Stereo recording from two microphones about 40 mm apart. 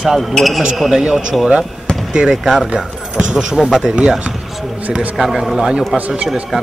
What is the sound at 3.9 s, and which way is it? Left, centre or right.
Speech, right.